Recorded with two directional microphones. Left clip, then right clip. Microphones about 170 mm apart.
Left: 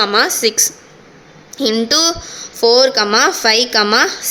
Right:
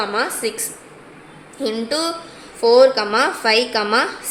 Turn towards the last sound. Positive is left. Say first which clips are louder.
# left 5 dB
turn(degrees=40)  # may be behind; listen again after turning